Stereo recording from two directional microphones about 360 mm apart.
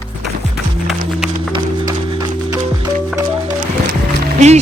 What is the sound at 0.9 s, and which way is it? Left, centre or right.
Music, centre.